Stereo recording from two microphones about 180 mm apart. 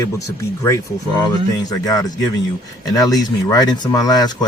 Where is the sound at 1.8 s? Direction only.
20° left (ahead or behind).